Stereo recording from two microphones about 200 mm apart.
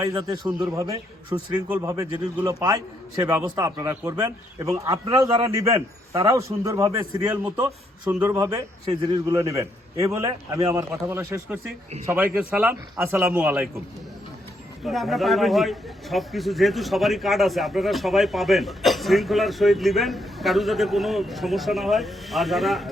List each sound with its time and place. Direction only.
0.0 s a man's voice: 20° right (ahead or behind)
5.7 s a man's voice: 15° right (ahead or behind)
8.9 s a man's voice: 25° right (ahead or behind)
9.3 s a man's voice: 15° right (ahead or behind)
14.8 s a man's voice: centre (ahead or behind)